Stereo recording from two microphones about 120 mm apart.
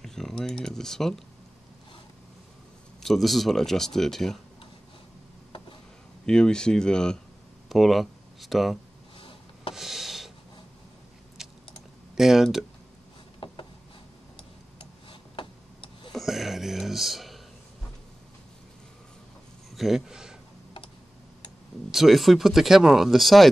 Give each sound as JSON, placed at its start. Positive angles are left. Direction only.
{"t": 0.0, "sound": "speech", "side_deg": 5}
{"t": 3.0, "sound": "speech", "side_deg": 0}
{"t": 6.2, "sound": "speech", "side_deg": 5}
{"t": 9.8, "sound": "a sound", "side_deg": 0}
{"t": 11.4, "sound": "typing", "side_deg": -5}
{"t": 12.2, "sound": "speech", "side_deg": -5}
{"t": 14.8, "sound": "tick-tock", "side_deg": 45}
{"t": 16.1, "sound": "a sound", "side_deg": 0}
{"t": 19.7, "sound": "a man's voice", "side_deg": 0}
{"t": 21.9, "sound": "speech", "side_deg": 0}